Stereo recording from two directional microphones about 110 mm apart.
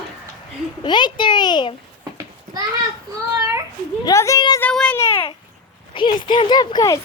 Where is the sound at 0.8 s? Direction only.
45° left (ahead or behind).